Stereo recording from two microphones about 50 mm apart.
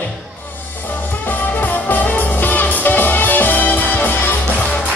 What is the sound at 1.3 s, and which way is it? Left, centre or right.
Music, left.